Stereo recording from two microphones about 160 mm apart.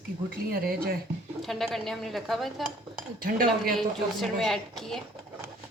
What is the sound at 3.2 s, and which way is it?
Speech, 60° right (ahead or behind).